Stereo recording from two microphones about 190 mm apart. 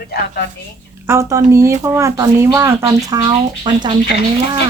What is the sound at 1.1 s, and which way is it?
Speech, 15° right (ahead or behind).